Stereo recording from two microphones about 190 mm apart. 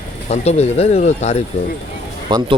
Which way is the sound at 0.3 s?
35° left (ahead or behind).